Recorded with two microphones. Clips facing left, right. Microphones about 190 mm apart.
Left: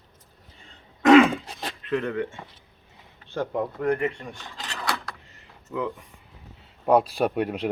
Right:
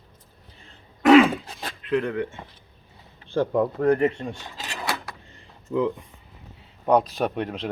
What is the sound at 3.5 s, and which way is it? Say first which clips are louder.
Speech: right 4 dB; 40° right (ahead or behind).